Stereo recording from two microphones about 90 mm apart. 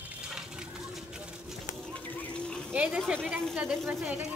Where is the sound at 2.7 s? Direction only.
15° right (ahead or behind).